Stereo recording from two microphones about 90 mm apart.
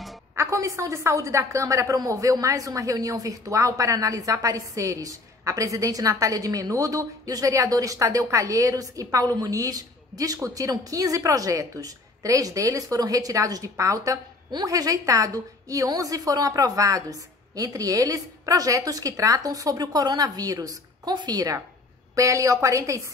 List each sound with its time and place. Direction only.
0.4 s a woman's voice: 35° right (ahead or behind)